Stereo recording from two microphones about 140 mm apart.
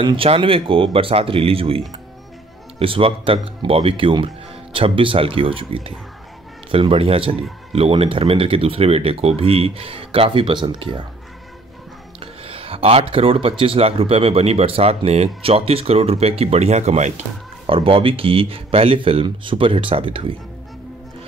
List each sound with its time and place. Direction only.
0.0 s speech: 40° right (ahead or behind)
2.8 s speech: 40° right (ahead or behind)
12.2 s speech: 40° right (ahead or behind)
17.6 s speech: 40° right (ahead or behind)